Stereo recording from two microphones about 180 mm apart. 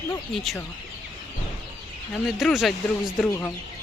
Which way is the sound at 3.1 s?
10° left (ahead or behind).